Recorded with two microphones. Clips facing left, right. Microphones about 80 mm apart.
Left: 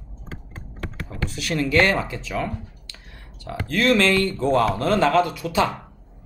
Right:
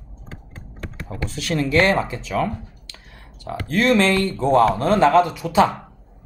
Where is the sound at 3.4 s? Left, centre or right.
Right.